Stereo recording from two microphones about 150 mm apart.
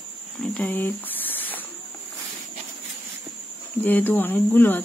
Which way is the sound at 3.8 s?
10° left (ahead or behind).